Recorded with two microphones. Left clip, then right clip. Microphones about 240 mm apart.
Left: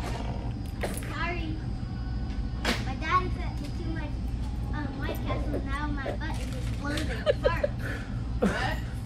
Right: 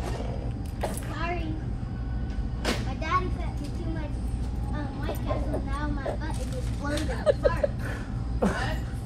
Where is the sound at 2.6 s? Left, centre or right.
Centre.